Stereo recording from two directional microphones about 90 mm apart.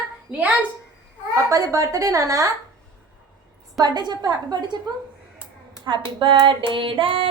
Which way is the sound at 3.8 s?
50° right (ahead or behind).